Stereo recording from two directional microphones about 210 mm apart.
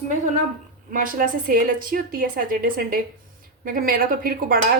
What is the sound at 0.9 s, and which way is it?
A woman's voice, 40° right (ahead or behind).